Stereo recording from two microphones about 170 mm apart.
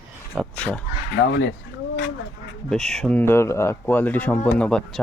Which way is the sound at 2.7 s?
Centre (ahead or behind).